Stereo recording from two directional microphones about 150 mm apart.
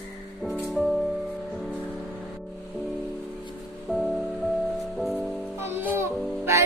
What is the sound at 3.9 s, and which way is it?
Music, 5° right (ahead or behind).